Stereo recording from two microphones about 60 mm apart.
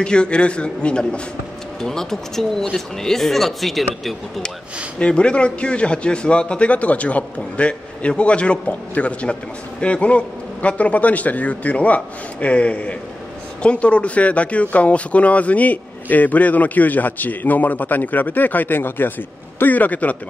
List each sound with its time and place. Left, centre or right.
0.0 s speech: centre
4.9 s a man's voice: centre